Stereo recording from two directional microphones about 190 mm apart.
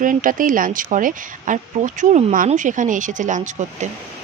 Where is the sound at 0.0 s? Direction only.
45° right (ahead or behind).